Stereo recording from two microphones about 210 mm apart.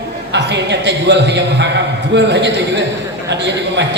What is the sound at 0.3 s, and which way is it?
A woman's voice, 55° right (ahead or behind).